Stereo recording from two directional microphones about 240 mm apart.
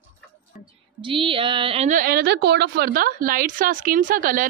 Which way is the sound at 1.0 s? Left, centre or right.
Right.